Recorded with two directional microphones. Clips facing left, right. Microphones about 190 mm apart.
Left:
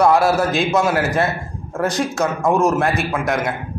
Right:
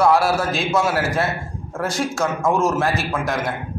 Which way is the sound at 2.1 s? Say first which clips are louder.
Left 2 dB; 20° left (ahead or behind).